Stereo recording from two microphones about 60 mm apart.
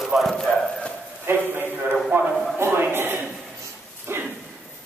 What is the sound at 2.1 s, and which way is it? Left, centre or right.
Speech, right.